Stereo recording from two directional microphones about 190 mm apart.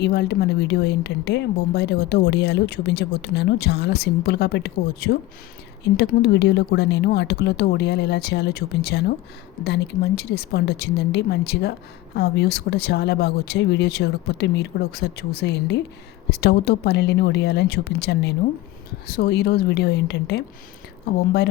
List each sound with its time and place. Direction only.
0.0 s speech: 60° left (ahead or behind)